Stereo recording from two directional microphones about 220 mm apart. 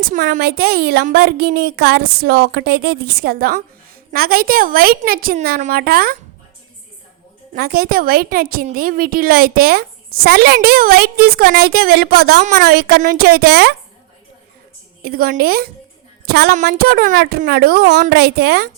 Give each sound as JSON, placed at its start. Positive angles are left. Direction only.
{"t": 0.1, "sound": "a woman's voice", "side_deg": -40}
{"t": 7.5, "sound": "a woman's voice", "side_deg": -45}
{"t": 15.0, "sound": "a woman's voice", "side_deg": -45}